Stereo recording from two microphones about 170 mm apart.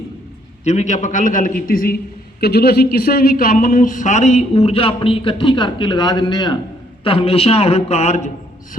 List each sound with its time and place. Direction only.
0.6 s a man's voice: 40° left (ahead or behind); by 2.0 s 60° left (ahead or behind)
2.4 s a man's voice: 70° left (ahead or behind); by 8.3 s 40° left (ahead or behind)